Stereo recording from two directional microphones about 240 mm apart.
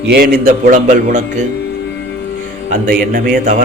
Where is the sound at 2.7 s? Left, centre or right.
Right.